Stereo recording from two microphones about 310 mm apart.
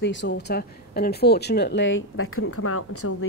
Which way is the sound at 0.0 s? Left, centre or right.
Left.